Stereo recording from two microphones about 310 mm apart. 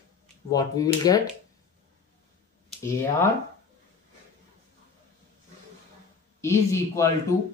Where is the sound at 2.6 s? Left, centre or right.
Centre.